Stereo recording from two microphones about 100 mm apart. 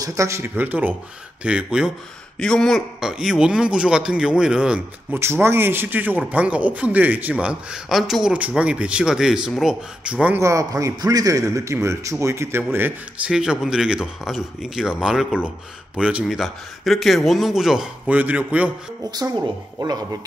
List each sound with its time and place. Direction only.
0.0 s a man's voice: 30° right (ahead or behind); by 1.9 s 10° right (ahead or behind)
2.3 s speech: 5° left (ahead or behind)
3.0 s a man's voice: 5° right (ahead or behind)
5.1 s a man's voice: 25° right (ahead or behind)
10.4 s a man's voice: 30° right (ahead or behind)
13.3 s a man's voice: 5° right (ahead or behind)
16.3 s a man's voice: centre (ahead or behind)
18.1 s a man's voice: 15° right (ahead or behind)
19.0 s a man's voice: 40° right (ahead or behind)